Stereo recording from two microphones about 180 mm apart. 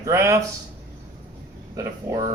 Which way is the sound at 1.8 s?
20° right (ahead or behind).